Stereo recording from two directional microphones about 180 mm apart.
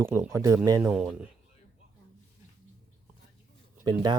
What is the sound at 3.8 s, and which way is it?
Speech, 25° right (ahead or behind).